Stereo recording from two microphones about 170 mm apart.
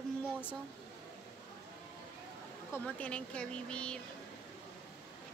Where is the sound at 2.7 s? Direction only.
10° left (ahead or behind).